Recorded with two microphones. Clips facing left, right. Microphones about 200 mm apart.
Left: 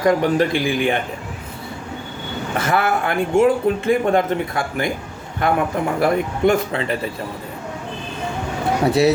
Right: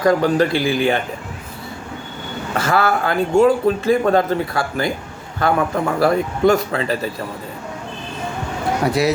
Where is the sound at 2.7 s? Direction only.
20° left (ahead or behind).